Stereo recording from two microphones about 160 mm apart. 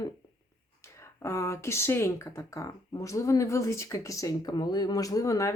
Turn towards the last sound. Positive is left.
turn(degrees=20)  # may be behind; listen again after turning